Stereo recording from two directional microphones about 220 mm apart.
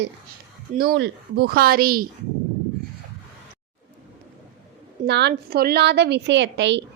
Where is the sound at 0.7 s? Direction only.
45° right (ahead or behind).